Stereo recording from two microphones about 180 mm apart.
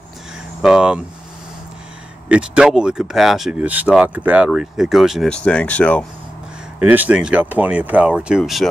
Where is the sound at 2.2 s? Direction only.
5° right (ahead or behind).